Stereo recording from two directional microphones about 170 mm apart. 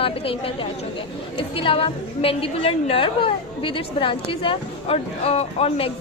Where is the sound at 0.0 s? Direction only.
35° left (ahead or behind).